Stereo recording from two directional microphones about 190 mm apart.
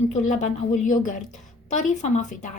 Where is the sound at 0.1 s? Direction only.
40° left (ahead or behind).